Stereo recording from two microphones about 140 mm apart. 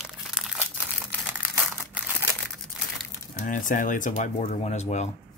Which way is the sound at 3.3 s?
70° left (ahead or behind).